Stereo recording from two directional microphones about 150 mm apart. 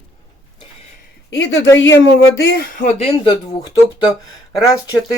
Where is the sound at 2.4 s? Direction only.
90° left.